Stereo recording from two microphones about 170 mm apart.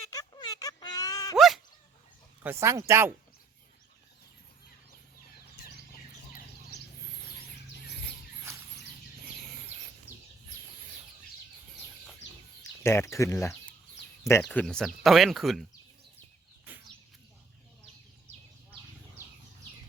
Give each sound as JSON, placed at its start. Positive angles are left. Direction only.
{"t": 0.0, "sound": "a sound", "side_deg": 20}
{"t": 1.4, "sound": "dog", "side_deg": 0}
{"t": 2.4, "sound": "speech", "side_deg": -15}
{"t": 8.5, "sound": "a sound", "side_deg": -15}
{"t": 12.8, "sound": "speech", "side_deg": 15}
{"t": 14.4, "sound": "speech", "side_deg": 5}